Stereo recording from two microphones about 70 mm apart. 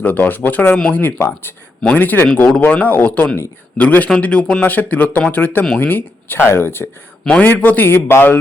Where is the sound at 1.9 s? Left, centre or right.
Left.